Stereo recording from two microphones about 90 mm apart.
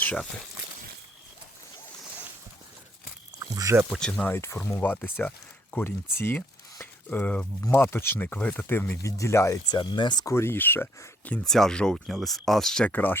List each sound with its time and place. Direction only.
3.4 s a sound: 40° right (ahead or behind)
4.2 s speech: 25° left (ahead or behind)
9.0 s speech: 35° left (ahead or behind)
9.6 s speech: 55° left (ahead or behind)
10.2 s speech: 30° left (ahead or behind)
11.4 s speech: 5° left (ahead or behind)
12.9 s speech: 20° left (ahead or behind)